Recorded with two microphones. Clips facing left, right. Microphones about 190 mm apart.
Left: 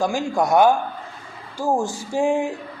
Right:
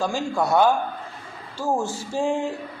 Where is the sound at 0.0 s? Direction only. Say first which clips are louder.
Left 3 dB; 15° left (ahead or behind).